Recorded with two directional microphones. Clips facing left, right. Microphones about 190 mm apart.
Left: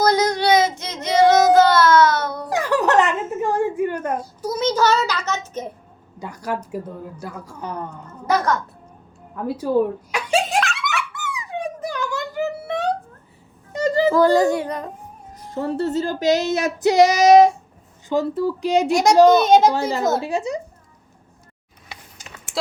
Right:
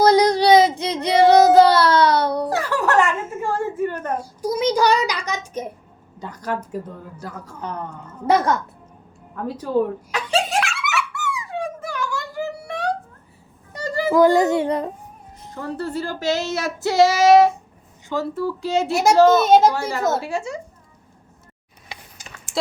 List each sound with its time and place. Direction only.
0.0 s child singing: 30° right (ahead or behind)
2.5 s a sound: 15° left (ahead or behind)
4.2 s child singing: 10° right (ahead or behind)
6.1 s speech: 10° left (ahead or behind)
9.3 s speech: 10° left (ahead or behind)
10.6 s a sound: 5° right (ahead or behind)
11.1 s squeak: 15° left (ahead or behind)
13.7 s music: 20° left (ahead or behind)
14.1 s a sound: 20° right (ahead or behind)
15.5 s speech: 25° left (ahead or behind)
19.4 s a child's voice: 5° right (ahead or behind)
19.7 s speech: 20° left (ahead or behind)